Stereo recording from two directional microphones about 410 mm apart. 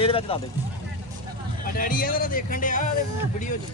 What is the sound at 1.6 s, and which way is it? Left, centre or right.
Speech, left.